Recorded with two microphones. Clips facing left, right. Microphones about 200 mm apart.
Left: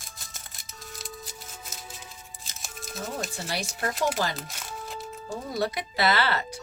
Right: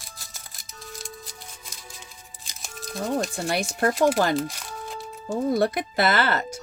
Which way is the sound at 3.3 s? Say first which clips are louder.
Right 7 dB; 55° right (ahead or behind).